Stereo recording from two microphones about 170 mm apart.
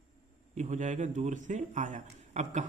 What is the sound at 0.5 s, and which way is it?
A man's voice, 45° right (ahead or behind).